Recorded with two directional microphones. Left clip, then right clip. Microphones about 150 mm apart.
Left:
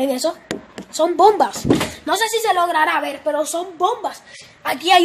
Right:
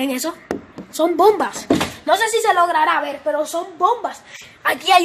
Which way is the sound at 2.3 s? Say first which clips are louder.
Right 2 dB; 5° left (ahead or behind).